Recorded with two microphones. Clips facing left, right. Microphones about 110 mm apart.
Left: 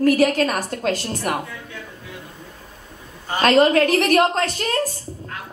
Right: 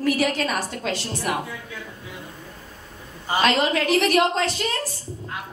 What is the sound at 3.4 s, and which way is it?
A woman's voice, 45° left (ahead or behind).